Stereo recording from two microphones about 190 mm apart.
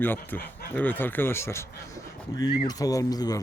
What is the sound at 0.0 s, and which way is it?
Speech, 10° left (ahead or behind).